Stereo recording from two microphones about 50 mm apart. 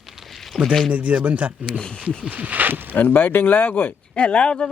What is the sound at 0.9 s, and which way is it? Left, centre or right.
Speech, right.